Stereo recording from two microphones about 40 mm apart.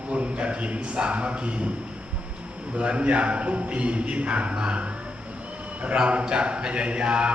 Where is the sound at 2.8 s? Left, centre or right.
Right.